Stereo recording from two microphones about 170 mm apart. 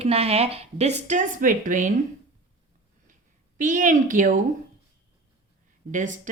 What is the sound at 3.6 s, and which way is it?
Speech, 50° right (ahead or behind).